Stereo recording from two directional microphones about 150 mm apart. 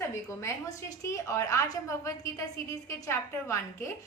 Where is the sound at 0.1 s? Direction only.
20° left (ahead or behind).